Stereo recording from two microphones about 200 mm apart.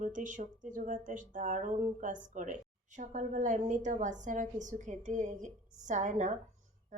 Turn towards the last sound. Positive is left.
turn(degrees=-40)  # may be behind; listen again after turning